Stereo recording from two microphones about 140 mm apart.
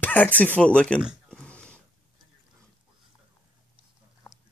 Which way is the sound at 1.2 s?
10° left (ahead or behind).